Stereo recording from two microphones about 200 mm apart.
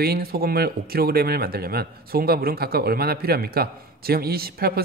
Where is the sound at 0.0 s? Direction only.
50° right (ahead or behind).